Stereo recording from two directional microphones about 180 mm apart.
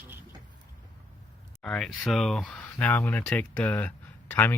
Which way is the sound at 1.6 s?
5° left (ahead or behind).